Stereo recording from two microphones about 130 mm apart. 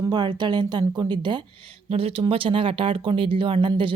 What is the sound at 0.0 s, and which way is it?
A woman's voice, 35° right (ahead or behind).